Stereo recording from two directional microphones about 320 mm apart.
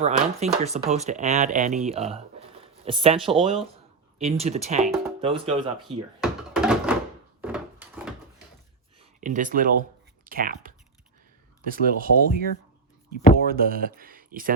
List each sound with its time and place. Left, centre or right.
0.0 s speech: centre
4.8 s music: centre
5.2 s speech: centre
6.2 s door: centre
7.4 s wood: centre
9.2 s speech: right